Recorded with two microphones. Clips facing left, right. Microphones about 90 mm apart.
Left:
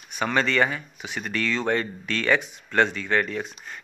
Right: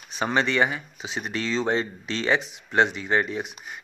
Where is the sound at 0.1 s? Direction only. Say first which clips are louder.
Even; 20° right (ahead or behind).